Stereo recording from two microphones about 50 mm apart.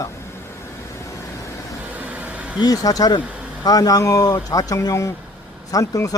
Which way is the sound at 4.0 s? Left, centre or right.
Left.